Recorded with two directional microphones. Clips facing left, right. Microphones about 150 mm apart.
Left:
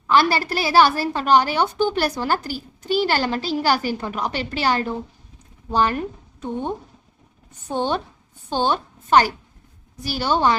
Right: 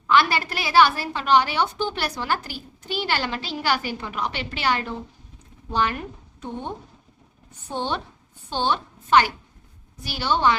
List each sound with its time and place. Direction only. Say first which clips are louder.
0.1 s a woman's voice: left 2 dB; 35° left (ahead or behind)
7.7 s a woman's voice: left 5 dB; 45° left (ahead or behind)